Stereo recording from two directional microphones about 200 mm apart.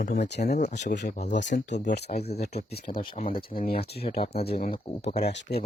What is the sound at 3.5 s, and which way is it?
Speech, 45° left (ahead or behind).